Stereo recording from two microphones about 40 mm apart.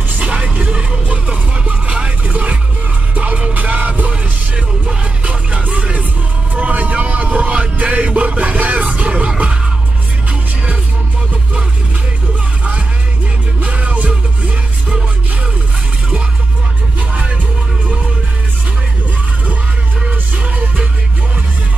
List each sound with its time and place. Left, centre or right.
0.2 s music: right
13.6 s music: right
17.1 s music: right
20.1 s music: right